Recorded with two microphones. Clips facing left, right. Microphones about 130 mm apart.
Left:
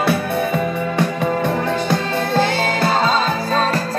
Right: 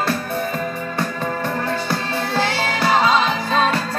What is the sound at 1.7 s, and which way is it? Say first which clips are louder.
Music: left 4 dB; 20° left (ahead or behind).